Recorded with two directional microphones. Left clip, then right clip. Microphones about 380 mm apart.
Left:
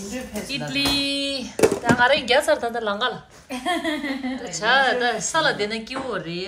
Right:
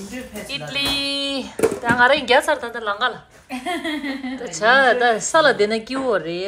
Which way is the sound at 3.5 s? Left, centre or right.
Left.